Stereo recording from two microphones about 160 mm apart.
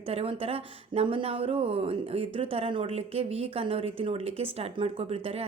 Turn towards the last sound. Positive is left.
turn(degrees=-40)  # may be behind; listen again after turning